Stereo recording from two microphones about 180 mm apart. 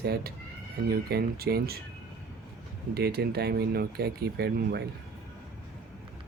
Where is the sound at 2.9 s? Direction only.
65° right (ahead or behind).